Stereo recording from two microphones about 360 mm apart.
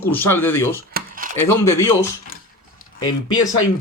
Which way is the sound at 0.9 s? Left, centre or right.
Right.